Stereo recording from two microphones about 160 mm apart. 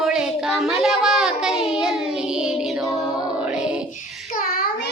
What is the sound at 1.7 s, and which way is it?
Child singing, 5° right (ahead or behind).